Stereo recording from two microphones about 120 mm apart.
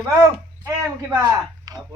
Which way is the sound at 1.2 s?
30° right (ahead or behind).